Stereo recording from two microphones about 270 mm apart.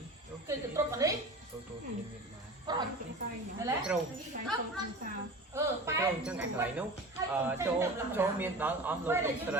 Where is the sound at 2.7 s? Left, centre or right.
Centre.